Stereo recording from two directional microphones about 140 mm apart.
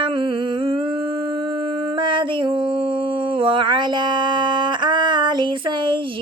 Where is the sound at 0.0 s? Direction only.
35° right (ahead or behind).